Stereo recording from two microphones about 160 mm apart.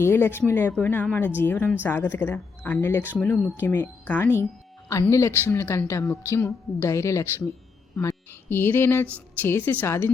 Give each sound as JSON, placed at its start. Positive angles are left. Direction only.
{"t": 0.0, "sound": "a woman's voice", "side_deg": 15}